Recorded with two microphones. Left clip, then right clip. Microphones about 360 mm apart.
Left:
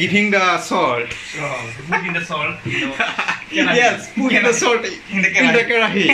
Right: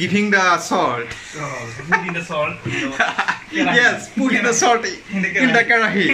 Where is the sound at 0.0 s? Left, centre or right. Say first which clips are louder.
Left 1 dB; centre.